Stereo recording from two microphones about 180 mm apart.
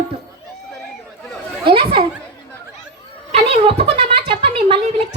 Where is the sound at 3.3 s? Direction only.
30° right (ahead or behind).